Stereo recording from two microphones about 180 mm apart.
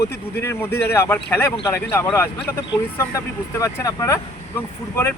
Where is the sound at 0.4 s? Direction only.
15° left (ahead or behind).